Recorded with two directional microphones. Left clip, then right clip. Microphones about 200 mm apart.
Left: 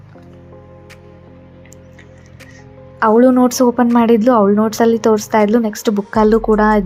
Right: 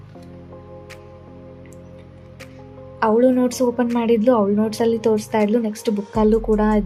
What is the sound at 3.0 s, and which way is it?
A woman's voice, 20° left (ahead or behind).